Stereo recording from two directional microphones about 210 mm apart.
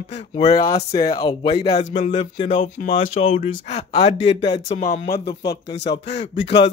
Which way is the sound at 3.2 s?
30° left (ahead or behind).